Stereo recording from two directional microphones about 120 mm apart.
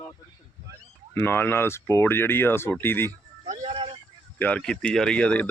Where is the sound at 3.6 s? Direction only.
50° right (ahead or behind).